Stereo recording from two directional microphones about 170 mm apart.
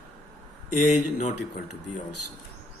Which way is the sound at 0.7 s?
45° left (ahead or behind).